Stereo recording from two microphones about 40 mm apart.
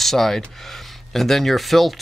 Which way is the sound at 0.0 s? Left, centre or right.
Centre.